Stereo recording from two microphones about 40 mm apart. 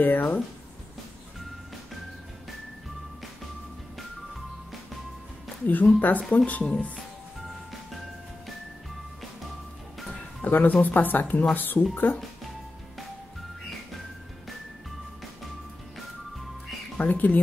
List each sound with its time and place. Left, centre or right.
0.0 s speech: left
5.7 s speech: left
10.4 s speech: left
17.0 s speech: left